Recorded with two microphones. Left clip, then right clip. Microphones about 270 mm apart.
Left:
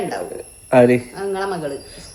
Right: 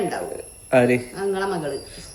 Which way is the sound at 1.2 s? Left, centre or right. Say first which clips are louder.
Left 1 dB; centre.